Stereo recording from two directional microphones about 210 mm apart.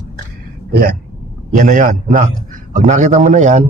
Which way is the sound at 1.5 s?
35° right (ahead or behind).